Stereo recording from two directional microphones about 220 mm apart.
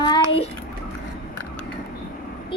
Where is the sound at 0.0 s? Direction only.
20° left (ahead or behind).